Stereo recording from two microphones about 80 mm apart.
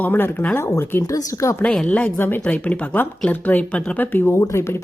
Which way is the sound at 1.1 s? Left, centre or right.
Left.